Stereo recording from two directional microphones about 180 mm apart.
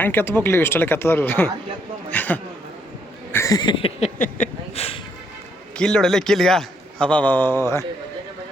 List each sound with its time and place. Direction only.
0.0 s a man's voice: 10° left (ahead or behind)
3.3 s a sound: 20° left (ahead or behind)
4.2 s speech: 40° left (ahead or behind)
5.7 s a man's voice: 5° left (ahead or behind)